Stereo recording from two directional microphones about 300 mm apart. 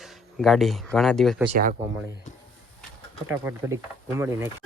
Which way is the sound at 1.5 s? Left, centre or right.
Right.